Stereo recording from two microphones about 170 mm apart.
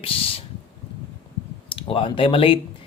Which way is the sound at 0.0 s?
35° left (ahead or behind).